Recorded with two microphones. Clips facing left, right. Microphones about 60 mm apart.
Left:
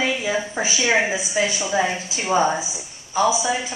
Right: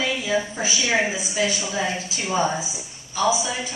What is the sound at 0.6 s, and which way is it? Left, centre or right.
Speech, centre.